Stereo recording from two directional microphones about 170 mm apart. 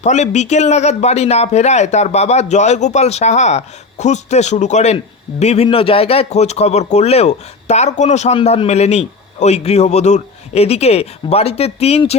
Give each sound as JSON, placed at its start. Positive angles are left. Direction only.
{"t": 0.0, "sound": "a man's voice", "side_deg": 45}